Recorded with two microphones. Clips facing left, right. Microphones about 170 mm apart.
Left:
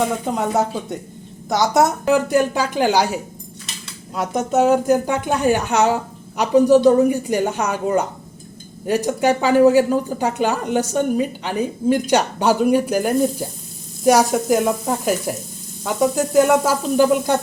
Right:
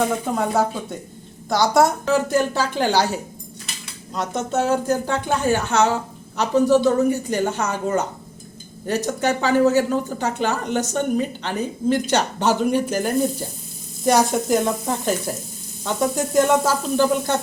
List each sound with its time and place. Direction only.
0.3 s a woman's voice: 20° left (ahead or behind)
9.0 s a woman's voice: 15° left (ahead or behind)